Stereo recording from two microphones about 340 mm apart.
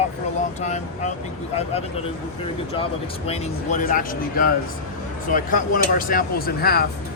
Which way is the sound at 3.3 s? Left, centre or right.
Centre.